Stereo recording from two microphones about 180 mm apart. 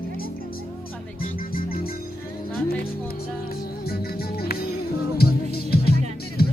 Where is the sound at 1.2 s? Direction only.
50° left (ahead or behind).